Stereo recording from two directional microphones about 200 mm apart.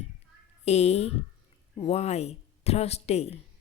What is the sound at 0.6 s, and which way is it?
Speech, 35° left (ahead or behind).